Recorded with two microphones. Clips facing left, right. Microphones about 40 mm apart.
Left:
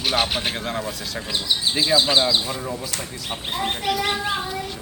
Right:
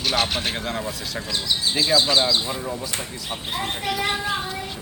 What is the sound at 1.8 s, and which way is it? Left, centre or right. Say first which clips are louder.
Speech: even; centre.